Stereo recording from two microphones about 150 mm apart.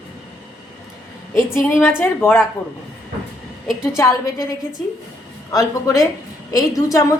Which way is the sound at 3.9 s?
20° left (ahead or behind).